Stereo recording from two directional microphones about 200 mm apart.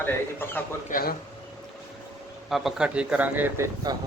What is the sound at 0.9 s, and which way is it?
Speech, 45° left (ahead or behind).